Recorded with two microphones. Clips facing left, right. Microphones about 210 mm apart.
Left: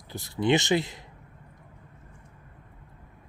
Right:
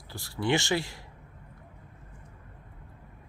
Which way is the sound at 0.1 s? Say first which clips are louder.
Left 4 dB; 20° left (ahead or behind).